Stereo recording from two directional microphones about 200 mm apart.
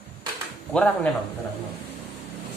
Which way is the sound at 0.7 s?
5° left (ahead or behind).